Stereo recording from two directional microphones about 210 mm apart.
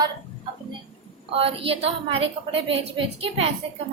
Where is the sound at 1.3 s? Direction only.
25° right (ahead or behind).